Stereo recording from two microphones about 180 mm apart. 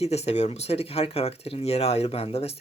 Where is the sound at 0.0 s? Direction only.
35° left (ahead or behind).